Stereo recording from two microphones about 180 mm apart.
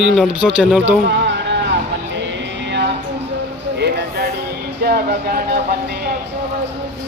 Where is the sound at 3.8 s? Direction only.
65° right (ahead or behind).